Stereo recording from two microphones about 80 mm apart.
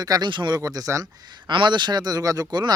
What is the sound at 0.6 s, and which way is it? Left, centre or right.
Speech, right.